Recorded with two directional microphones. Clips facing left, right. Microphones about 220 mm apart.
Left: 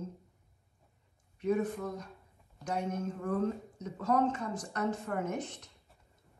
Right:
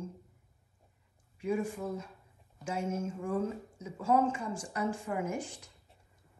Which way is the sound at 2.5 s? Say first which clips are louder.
Even; 5° right (ahead or behind).